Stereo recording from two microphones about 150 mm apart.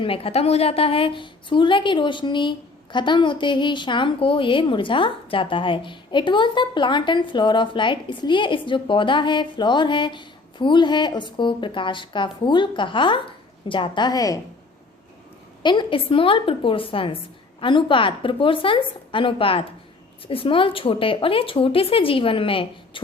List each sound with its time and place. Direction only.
0.0 s a woman's voice: 40° left (ahead or behind)
15.6 s a woman's voice: 30° left (ahead or behind)